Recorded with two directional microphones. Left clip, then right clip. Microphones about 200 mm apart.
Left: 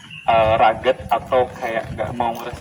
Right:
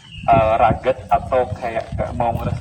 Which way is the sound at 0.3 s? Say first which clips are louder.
Even; 5° left (ahead or behind).